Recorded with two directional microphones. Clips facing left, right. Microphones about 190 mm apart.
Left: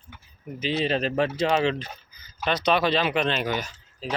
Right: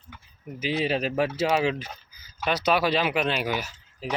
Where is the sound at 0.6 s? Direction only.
10° right (ahead or behind).